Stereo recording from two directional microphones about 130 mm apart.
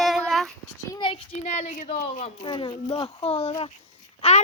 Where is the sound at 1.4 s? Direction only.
65° left (ahead or behind).